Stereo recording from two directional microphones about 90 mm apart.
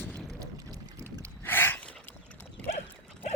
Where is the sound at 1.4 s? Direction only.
25° left (ahead or behind).